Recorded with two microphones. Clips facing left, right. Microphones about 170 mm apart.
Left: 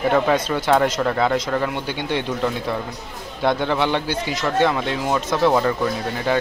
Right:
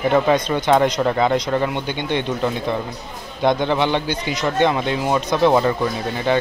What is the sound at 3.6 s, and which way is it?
Speech, 5° left (ahead or behind).